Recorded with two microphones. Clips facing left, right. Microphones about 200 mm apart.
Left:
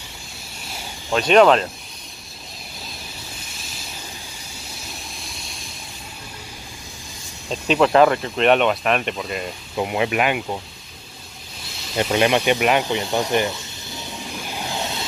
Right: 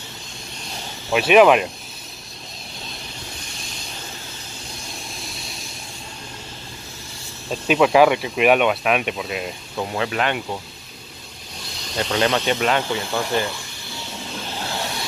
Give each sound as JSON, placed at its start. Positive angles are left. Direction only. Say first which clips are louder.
{"t": 1.1, "sound": "speech", "louder": "right 1 dB", "side_deg": -5}
{"t": 5.2, "sound": "vehicle", "louder": "right 2 dB", "side_deg": 0}
{"t": 7.6, "sound": "speech", "louder": "even", "side_deg": -5}
{"t": 9.8, "sound": "speech", "louder": "left 3 dB", "side_deg": 15}
{"t": 12.1, "sound": "snake", "louder": "left 2 dB", "side_deg": 10}